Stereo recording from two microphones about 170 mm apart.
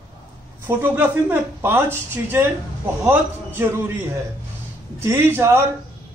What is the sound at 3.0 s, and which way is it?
A man's voice, 10° right (ahead or behind).